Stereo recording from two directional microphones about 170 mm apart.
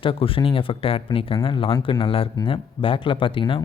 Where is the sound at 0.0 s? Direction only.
30° left (ahead or behind).